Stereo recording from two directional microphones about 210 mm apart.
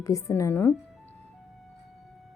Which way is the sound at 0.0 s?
15° left (ahead or behind).